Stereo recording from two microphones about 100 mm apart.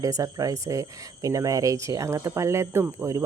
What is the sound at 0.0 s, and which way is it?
Speech, 35° right (ahead or behind).